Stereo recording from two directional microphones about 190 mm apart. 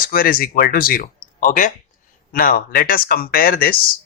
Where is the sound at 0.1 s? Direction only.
50° left (ahead or behind).